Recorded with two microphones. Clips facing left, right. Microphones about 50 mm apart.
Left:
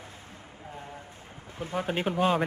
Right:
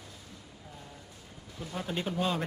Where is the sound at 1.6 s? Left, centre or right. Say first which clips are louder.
Left 5 dB; left.